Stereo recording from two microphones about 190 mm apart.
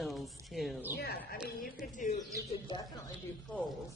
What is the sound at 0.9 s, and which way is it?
Speech, 55° left (ahead or behind).